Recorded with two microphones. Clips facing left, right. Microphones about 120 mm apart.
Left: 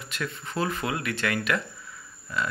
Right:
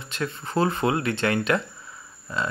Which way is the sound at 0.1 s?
30° right (ahead or behind).